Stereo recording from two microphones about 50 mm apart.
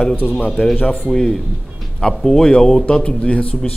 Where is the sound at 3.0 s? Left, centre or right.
Left.